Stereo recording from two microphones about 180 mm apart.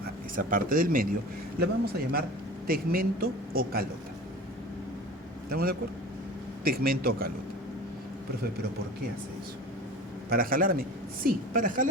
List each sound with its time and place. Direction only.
0.3 s a woman's voice: 50° right (ahead or behind)
5.5 s a man's voice: 55° right (ahead or behind)
10.2 s a woman's voice: 55° right (ahead or behind)